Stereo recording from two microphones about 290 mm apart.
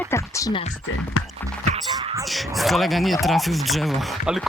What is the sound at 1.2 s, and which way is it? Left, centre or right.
Music, left.